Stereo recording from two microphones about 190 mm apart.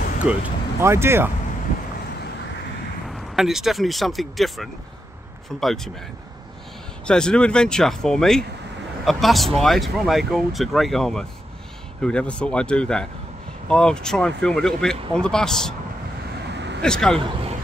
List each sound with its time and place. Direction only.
0.2 s speech: 10° right (ahead or behind)
3.1 s speech: centre (ahead or behind)
7.1 s speech: 5° left (ahead or behind)
16.4 s vehicle: 65° right (ahead or behind)
16.8 s speech: 5° left (ahead or behind)